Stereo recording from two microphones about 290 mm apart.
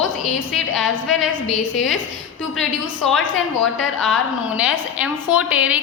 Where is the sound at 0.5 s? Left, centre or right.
Centre.